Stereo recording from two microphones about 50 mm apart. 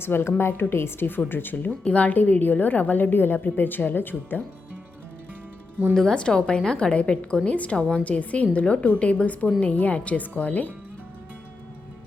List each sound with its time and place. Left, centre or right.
0.0 s speech: left
1.8 s a woman's voice: left
5.9 s a woman's voice: centre; by 10.7 s left